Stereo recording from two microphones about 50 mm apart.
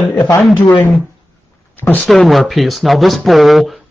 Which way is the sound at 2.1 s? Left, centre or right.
Centre.